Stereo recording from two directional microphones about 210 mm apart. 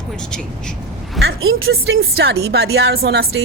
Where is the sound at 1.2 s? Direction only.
50° right (ahead or behind).